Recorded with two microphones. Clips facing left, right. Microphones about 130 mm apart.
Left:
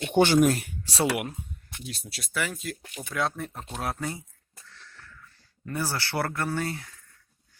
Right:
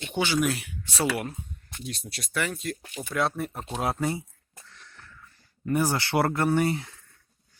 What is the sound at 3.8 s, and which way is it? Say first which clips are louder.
Speech: right 5 dB; 25° right (ahead or behind).